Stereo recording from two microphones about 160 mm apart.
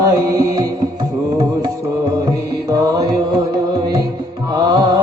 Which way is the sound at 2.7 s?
20° right (ahead or behind).